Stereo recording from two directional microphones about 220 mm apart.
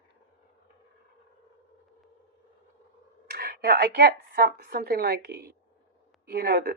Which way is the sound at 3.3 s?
40° right (ahead or behind).